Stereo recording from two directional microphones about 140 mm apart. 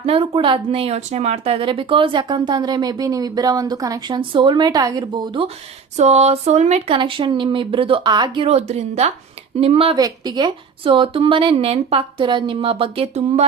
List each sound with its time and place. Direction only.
0.0 s speech: 40° right (ahead or behind)
6.0 s speech: 50° right (ahead or behind)
10.0 s speech: 30° right (ahead or behind); by 13.5 s 50° right (ahead or behind)